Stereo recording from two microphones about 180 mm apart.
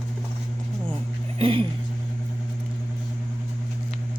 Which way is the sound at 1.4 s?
30° right (ahead or behind).